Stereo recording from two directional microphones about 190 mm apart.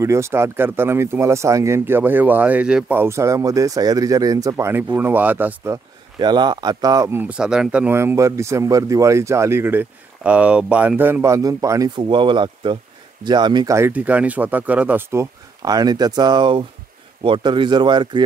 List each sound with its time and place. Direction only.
0.0 s speech: 15° right (ahead or behind)
6.1 s speech: 20° right (ahead or behind)